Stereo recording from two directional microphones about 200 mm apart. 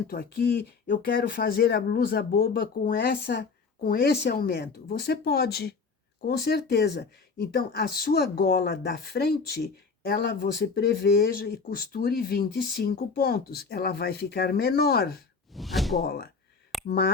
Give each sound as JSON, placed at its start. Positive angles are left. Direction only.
{"t": 0.1, "sound": "speech", "side_deg": 50}
{"t": 15.5, "sound": "a sound", "side_deg": 0}
{"t": 16.0, "sound": "speech", "side_deg": 50}